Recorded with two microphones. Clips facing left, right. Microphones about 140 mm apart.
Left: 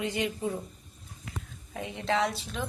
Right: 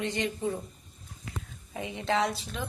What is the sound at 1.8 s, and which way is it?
Speech, centre (ahead or behind).